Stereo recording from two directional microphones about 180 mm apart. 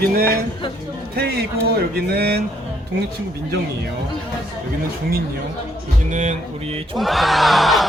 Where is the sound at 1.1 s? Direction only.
60° right (ahead or behind).